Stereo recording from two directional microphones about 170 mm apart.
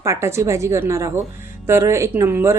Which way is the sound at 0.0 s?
15° right (ahead or behind).